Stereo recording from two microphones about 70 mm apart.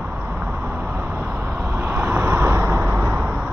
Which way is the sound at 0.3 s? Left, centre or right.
Right.